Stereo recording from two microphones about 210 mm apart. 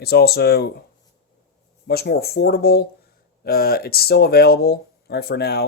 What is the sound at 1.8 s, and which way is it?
Speech, 50° left (ahead or behind).